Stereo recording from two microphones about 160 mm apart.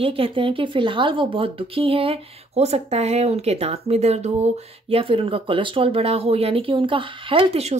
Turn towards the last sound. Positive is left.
turn(degrees=-40)  # may be behind; listen again after turning